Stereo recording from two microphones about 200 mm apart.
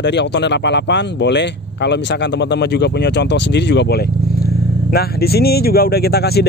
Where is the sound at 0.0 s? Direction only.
60° left (ahead or behind).